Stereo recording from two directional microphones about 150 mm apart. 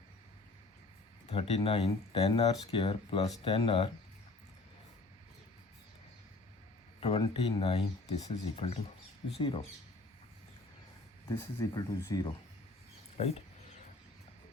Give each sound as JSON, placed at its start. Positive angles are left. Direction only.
{"t": 1.3, "sound": "speech", "side_deg": 40}
{"t": 7.0, "sound": "speech", "side_deg": 40}
{"t": 11.3, "sound": "speech", "side_deg": 20}
{"t": 13.1, "sound": "speech", "side_deg": 40}